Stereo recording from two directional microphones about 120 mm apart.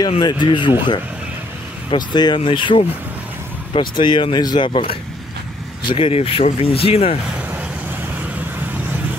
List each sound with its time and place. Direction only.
0.2 s speech: 40° left (ahead or behind)
5.9 s speech: 50° left (ahead or behind)